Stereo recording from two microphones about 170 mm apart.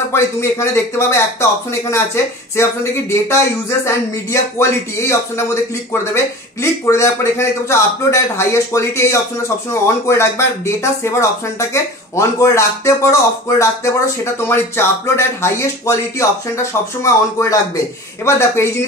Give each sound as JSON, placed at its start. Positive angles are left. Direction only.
{"t": 0.1, "sound": "speech", "side_deg": 15}